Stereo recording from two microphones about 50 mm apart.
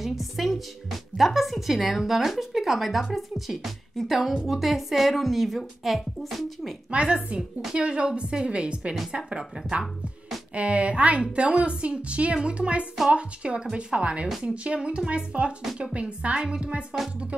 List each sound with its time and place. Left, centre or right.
0.0 s music: centre
1.1 s speech: centre
6.9 s a woman's voice: right
10.5 s a woman's voice: right